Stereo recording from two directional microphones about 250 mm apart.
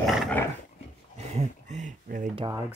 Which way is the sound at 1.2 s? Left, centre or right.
Right.